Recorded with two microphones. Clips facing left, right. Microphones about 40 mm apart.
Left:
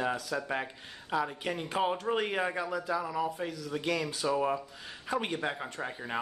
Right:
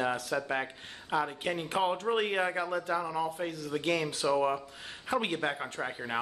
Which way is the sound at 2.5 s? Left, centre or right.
Right.